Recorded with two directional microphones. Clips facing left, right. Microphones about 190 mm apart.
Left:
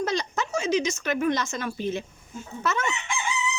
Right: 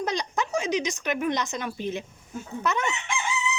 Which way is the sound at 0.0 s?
15° right (ahead or behind).